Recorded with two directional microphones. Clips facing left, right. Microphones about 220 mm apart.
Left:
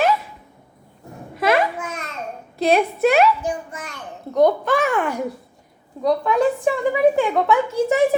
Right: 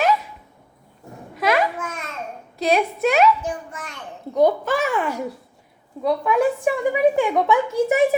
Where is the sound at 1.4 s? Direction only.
5° left (ahead or behind).